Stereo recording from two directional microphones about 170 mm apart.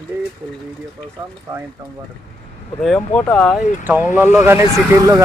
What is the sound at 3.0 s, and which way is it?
Speech, 10° left (ahead or behind).